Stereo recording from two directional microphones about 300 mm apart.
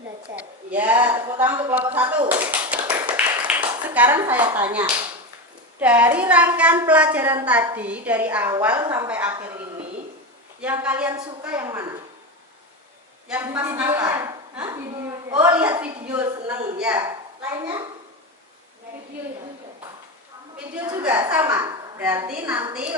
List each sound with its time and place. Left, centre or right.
0.3 s a woman's voice: centre
2.4 s clapping: centre
5.8 s a woman's voice: centre
10.6 s a woman's voice: centre
13.2 s a woman's voice: centre
20.7 s a woman's voice: centre